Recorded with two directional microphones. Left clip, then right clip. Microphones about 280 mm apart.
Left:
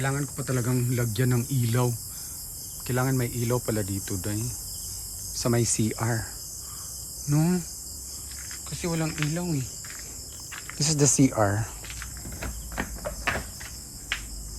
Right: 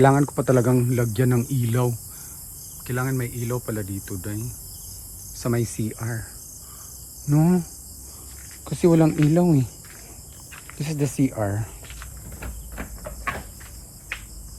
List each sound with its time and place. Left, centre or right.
0.0 s speech: centre
7.3 s speech: centre
8.6 s speech: centre
10.7 s speech: centre